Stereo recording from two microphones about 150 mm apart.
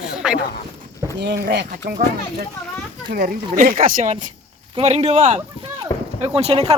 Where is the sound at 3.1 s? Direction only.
75° right (ahead or behind); by 4.3 s 60° right (ahead or behind).